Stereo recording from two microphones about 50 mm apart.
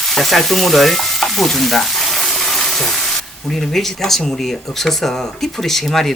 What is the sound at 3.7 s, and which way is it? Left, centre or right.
Frying, centre.